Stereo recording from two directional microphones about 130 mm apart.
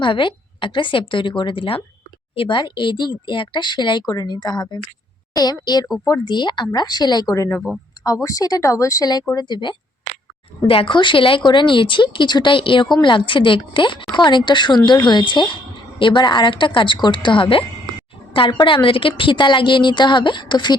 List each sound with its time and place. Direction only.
0.0 s speech: 40° left (ahead or behind)
18.6 s speech: 40° left (ahead or behind)